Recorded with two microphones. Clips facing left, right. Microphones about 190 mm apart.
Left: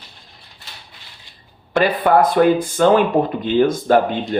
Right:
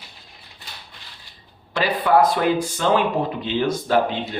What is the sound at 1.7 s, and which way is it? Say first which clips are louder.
Speech: left 3 dB; 55° left (ahead or behind).